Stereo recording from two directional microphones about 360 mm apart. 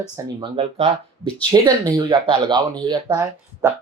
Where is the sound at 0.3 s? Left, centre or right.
Centre.